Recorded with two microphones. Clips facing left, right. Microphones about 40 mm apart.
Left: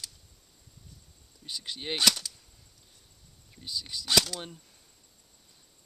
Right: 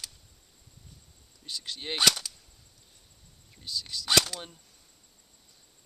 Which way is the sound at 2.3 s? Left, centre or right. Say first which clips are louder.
Even; centre.